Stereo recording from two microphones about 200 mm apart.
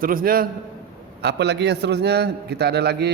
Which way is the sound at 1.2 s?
55° right (ahead or behind).